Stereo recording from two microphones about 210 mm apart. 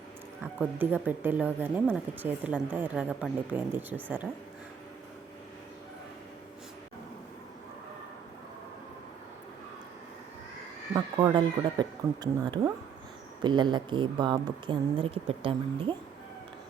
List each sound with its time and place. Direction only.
0.6 s speech: 10° right (ahead or behind)
10.9 s speech: 20° right (ahead or behind)